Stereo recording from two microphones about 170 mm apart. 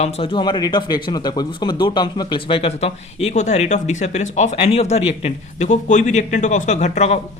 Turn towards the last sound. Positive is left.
turn(degrees=40)  # may be behind; listen again after turning